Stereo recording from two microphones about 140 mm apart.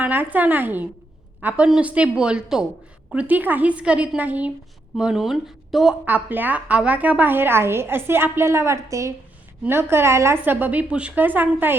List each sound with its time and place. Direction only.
0.0 s a woman's voice: 15° right (ahead or behind)
6.1 s a woman's voice: 10° right (ahead or behind)